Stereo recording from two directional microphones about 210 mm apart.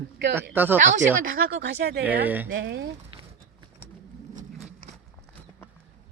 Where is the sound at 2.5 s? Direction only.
60° right (ahead or behind).